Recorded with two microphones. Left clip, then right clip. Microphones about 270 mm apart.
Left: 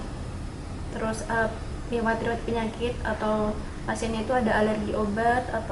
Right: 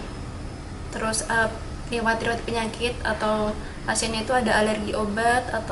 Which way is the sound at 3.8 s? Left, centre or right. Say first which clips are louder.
Right 3 dB; centre.